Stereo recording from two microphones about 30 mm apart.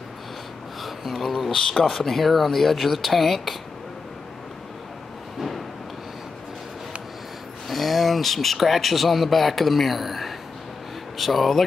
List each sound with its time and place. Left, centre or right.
0.8 s a sound: centre
1.2 s speech: centre
1.5 s speech: left
2.0 s speech: centre
7.6 s speech: centre